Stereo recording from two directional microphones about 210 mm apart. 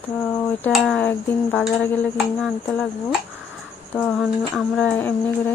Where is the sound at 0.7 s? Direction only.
5° left (ahead or behind).